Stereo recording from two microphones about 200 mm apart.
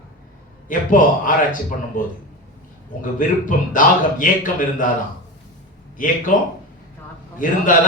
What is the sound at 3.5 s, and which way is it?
A man's voice, 40° left (ahead or behind).